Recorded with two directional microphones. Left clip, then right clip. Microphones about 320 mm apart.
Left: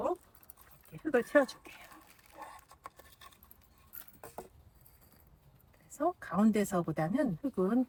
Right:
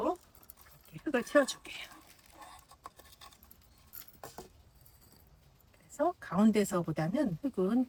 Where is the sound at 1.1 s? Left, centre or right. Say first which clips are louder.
Left 1 dB; centre.